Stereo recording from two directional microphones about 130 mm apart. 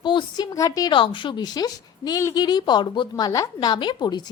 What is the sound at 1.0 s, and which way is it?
Speech, 40° left (ahead or behind).